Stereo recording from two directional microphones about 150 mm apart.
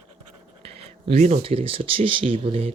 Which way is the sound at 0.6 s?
45° right (ahead or behind).